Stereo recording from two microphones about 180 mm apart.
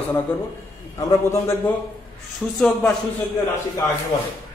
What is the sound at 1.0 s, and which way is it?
Speech, 15° left (ahead or behind).